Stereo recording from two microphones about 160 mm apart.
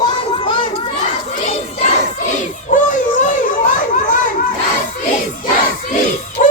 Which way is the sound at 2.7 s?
50° left (ahead or behind).